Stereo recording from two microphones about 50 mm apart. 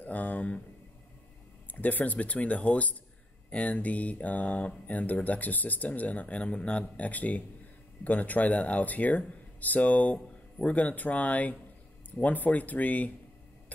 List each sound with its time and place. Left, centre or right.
0.0 s speech: left
1.7 s speech: left